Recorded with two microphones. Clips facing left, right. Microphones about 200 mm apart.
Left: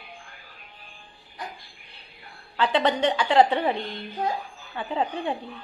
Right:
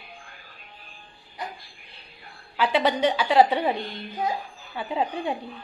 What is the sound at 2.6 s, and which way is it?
A woman's voice, 10° right (ahead or behind).